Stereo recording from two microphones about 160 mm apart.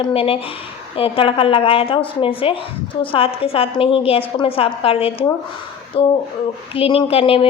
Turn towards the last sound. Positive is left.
turn(degrees=35)  # may be behind; listen again after turning